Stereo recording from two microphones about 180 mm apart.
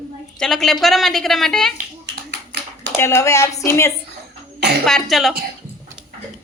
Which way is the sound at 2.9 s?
15° left (ahead or behind).